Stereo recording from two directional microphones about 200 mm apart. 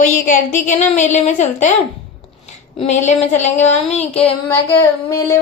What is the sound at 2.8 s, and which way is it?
Speech, 35° left (ahead or behind).